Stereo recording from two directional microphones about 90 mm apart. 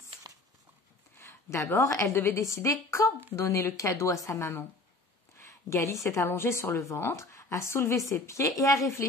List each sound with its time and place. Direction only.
1.1 s a woman's voice: 30° left (ahead or behind)